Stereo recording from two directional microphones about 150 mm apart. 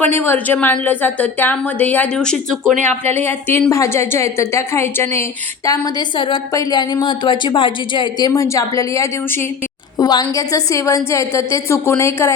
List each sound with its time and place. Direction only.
0.0 s a woman's voice: 15° left (ahead or behind)
3.2 s a woman's voice: 15° left (ahead or behind)
5.6 s a woman's voice: 25° left (ahead or behind)